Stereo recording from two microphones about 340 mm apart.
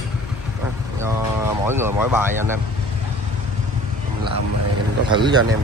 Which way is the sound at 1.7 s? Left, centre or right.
Centre.